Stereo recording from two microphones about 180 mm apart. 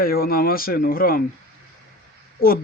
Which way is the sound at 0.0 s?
55° left (ahead or behind).